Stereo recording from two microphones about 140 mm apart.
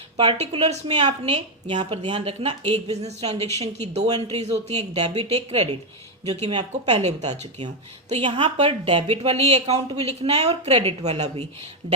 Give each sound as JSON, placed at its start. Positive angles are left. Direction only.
{"t": 0.3, "sound": "speech", "side_deg": -50}
{"t": 8.1, "sound": "speech", "side_deg": -40}
{"t": 8.4, "sound": "speech", "side_deg": -50}